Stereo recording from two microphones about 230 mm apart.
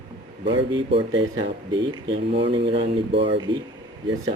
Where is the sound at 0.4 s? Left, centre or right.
Right.